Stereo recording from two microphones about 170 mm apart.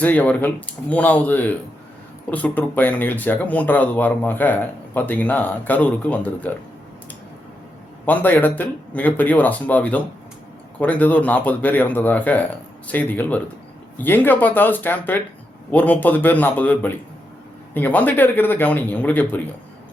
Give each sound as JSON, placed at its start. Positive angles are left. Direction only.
{"t": 0.0, "sound": "speech", "side_deg": 10}
{"t": 8.0, "sound": "speech", "side_deg": 10}